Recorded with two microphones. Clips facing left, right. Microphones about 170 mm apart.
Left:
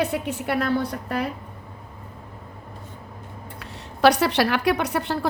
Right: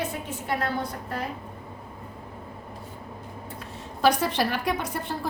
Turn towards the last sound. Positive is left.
turn(degrees=75)  # may be behind; listen again after turning